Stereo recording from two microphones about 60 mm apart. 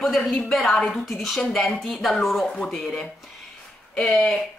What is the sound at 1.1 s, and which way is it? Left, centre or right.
A woman's voice, centre.